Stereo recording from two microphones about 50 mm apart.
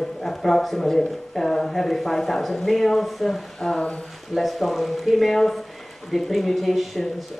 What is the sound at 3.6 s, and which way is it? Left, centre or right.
Speech, centre.